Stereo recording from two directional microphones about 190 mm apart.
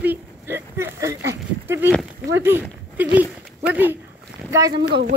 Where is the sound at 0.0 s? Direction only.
10° right (ahead or behind).